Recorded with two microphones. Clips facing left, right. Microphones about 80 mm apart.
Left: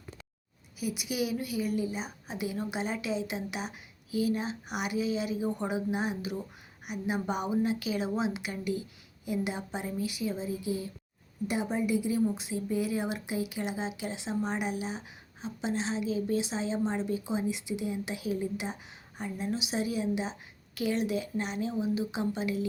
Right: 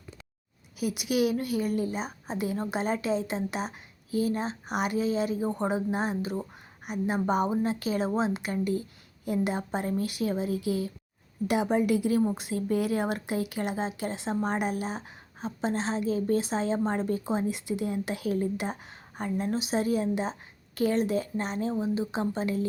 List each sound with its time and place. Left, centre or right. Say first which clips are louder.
0.8 s speech: right 6 dB; right
2.2 s a woman's voice: right 3 dB; right
11.4 s a woman's voice: right 5 dB; right